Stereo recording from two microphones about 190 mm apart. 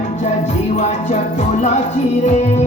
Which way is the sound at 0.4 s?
35° left (ahead or behind).